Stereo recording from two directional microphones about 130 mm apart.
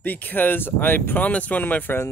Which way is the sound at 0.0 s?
15° left (ahead or behind).